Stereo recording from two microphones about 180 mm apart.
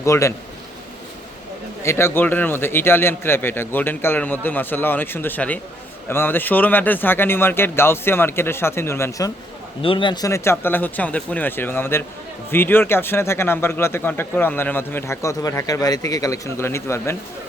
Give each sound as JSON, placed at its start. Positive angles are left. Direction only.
{"t": 0.0, "sound": "speech", "side_deg": 15}
{"t": 1.8, "sound": "speech", "side_deg": 15}
{"t": 9.8, "sound": "speech", "side_deg": 30}